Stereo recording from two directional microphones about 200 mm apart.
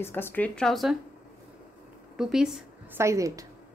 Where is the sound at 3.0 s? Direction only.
15° right (ahead or behind).